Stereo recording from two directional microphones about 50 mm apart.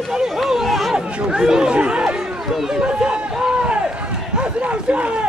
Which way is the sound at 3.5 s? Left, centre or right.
Right.